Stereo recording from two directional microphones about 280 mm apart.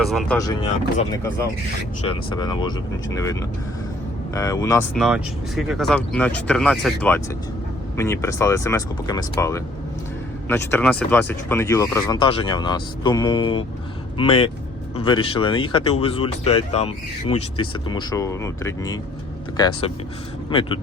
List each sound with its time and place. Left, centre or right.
0.0 s speech: centre
0.3 s speech: centre
4.4 s speech: centre
4.9 s speech: centre